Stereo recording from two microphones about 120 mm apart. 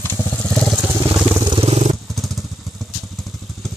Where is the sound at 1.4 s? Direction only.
45° right (ahead or behind).